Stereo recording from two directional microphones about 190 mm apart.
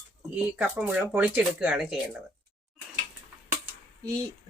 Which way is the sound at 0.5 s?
5° right (ahead or behind).